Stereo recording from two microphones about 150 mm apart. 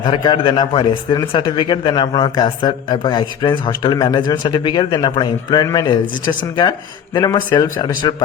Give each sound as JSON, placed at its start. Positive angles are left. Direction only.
{"t": 0.0, "sound": "a man's voice", "side_deg": 30}